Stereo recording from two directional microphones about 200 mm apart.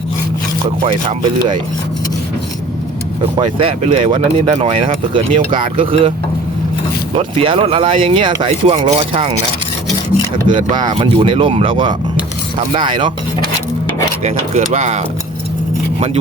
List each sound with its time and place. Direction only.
3.3 s speech: 25° right (ahead or behind)
7.2 s speech: 25° right (ahead or behind)
10.4 s speech: 25° right (ahead or behind)